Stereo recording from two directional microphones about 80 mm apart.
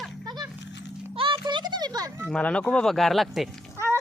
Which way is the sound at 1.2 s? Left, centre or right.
Right.